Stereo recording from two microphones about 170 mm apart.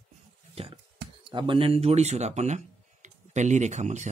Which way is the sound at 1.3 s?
30° right (ahead or behind).